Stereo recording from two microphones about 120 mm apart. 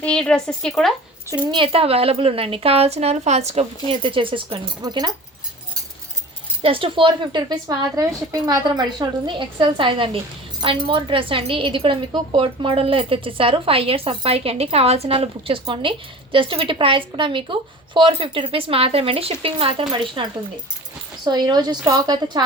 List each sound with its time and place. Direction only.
0.0 s a woman's voice: 5° left (ahead or behind)
1.5 s speech: 45° right (ahead or behind)
6.6 s a woman's voice: 50° right (ahead or behind); by 22.4 s 35° right (ahead or behind)